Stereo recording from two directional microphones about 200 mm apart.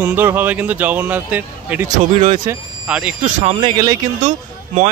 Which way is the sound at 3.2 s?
30° right (ahead or behind).